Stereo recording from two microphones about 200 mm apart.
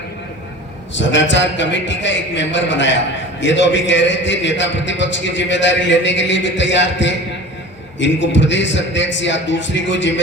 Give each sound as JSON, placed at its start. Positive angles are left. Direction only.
{"t": 0.9, "sound": "a man's voice", "side_deg": 65}